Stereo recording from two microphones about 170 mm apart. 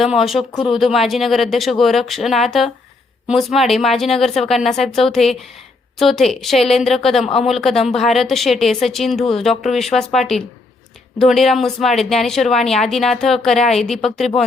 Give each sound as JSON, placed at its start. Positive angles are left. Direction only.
{"t": 0.0, "sound": "speech", "side_deg": 0}